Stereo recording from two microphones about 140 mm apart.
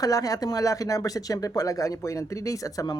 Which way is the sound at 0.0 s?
25° left (ahead or behind).